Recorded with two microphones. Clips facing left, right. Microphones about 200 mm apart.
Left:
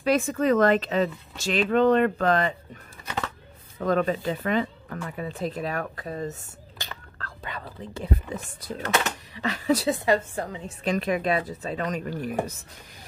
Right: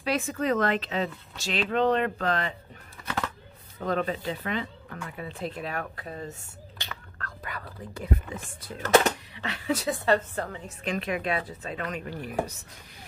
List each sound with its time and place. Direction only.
0.0 s speech: 50° left (ahead or behind)
3.8 s speech: 45° left (ahead or behind)
7.2 s speech: 25° left (ahead or behind)
9.8 s a woman's voice: 15° left (ahead or behind)
10.8 s speech: 40° left (ahead or behind)